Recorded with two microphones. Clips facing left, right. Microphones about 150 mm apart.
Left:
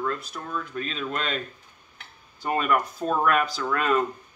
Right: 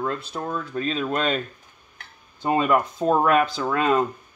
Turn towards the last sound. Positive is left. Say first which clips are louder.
# right 3 dB
turn(degrees=-25)  # may be behind; listen again after turning